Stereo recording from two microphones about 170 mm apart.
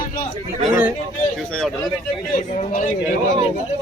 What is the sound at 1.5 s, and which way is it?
Speech, 5° left (ahead or behind).